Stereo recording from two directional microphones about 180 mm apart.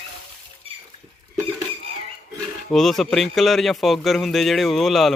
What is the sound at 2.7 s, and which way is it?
A man's voice, centre (ahead or behind).